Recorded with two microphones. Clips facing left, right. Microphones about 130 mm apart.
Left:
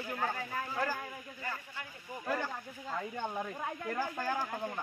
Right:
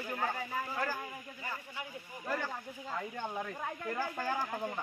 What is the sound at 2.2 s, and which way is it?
Speech, 5° left (ahead or behind).